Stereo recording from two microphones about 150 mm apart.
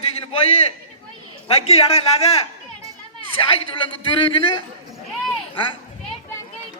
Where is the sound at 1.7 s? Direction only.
40° left (ahead or behind).